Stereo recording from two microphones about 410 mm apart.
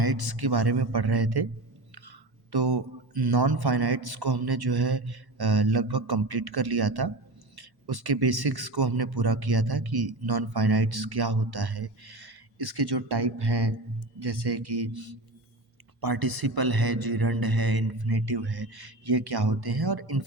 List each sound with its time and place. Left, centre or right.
0.0 s speech: right